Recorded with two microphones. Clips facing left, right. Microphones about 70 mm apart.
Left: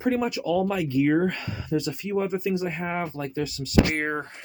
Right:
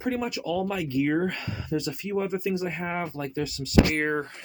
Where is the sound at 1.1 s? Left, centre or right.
Left.